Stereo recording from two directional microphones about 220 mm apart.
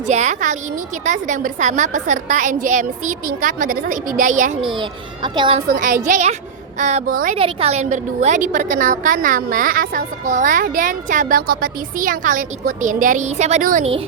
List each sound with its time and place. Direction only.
0.1 s a woman's voice: 35° right (ahead or behind)
4.6 s a woman's voice: 20° right (ahead or behind)
5.6 s a woman's voice: 40° right (ahead or behind)
7.3 s a woman's voice: 25° right (ahead or behind)